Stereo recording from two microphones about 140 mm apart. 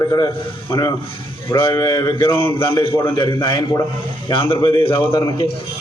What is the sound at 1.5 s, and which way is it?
A man's voice, 30° left (ahead or behind).